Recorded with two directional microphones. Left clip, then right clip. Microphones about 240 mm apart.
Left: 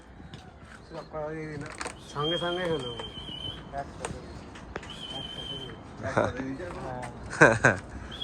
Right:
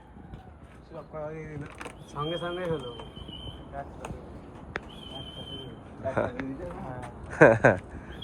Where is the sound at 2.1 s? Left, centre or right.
Left.